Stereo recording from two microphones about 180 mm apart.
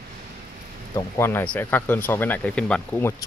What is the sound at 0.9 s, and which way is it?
Speech, 15° left (ahead or behind).